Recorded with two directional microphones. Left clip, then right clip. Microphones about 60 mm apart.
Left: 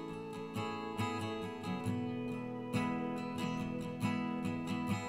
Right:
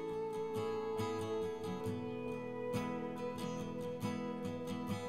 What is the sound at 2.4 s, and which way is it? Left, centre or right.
Music, left.